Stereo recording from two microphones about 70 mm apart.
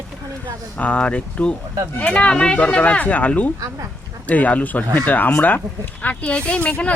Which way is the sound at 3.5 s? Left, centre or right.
Right.